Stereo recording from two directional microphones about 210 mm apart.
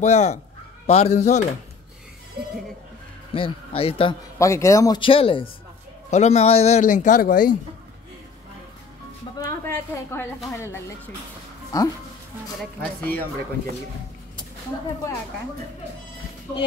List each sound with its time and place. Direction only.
0.0 s speech: 35° left (ahead or behind)
3.3 s speech: 25° left (ahead or behind)
4.4 s speech: 15° left (ahead or behind); by 7.5 s 40° left (ahead or behind)
9.4 s a woman's voice: 10° left (ahead or behind)